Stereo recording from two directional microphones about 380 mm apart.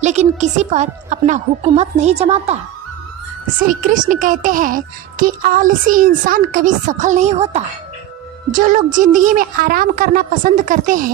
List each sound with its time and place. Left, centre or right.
0.0 s a woman's voice: centre
3.6 s speech: centre